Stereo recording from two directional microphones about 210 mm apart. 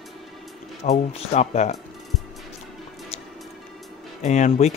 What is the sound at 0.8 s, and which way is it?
Speech, 30° left (ahead or behind).